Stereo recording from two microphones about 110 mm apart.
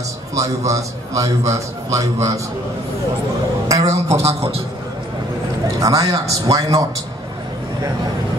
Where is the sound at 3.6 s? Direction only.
30° right (ahead or behind).